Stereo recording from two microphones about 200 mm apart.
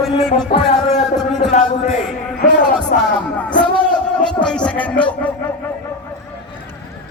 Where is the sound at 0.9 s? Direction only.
35° left (ahead or behind).